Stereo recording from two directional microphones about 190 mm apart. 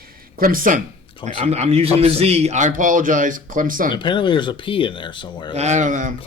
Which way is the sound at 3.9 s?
25° left (ahead or behind).